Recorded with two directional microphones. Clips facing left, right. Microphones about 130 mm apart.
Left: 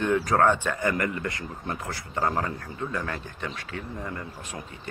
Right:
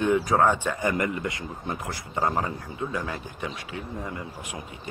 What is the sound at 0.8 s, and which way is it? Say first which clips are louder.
Speech: right 1 dB; 20° right (ahead or behind).